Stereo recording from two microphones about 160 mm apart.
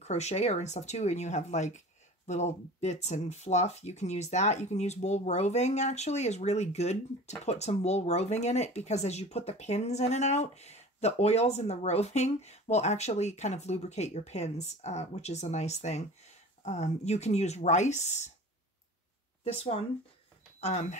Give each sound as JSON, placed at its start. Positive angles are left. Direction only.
{"t": 0.0, "sound": "speech", "side_deg": 45}
{"t": 19.4, "sound": "speech", "side_deg": 40}